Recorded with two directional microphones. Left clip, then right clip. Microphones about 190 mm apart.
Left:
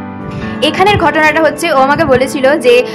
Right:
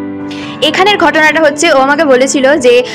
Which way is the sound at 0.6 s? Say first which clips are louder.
Right 1 dB; 20° right (ahead or behind).